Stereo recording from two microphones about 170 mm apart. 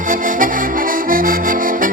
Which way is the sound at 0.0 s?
50° right (ahead or behind).